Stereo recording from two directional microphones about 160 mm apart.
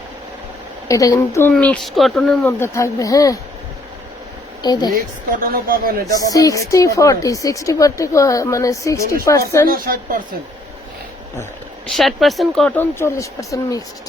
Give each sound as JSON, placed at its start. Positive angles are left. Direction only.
{"t": 0.9, "sound": "a woman's voice", "side_deg": 20}
{"t": 1.5, "sound": "speech", "side_deg": 5}
{"t": 4.6, "sound": "a woman's voice", "side_deg": 25}
{"t": 5.4, "sound": "speech", "side_deg": -65}
{"t": 6.3, "sound": "a woman's voice", "side_deg": 20}
{"t": 9.6, "sound": "speech", "side_deg": -65}
{"t": 11.9, "sound": "speech", "side_deg": 0}
{"t": 12.7, "sound": "speech", "side_deg": 15}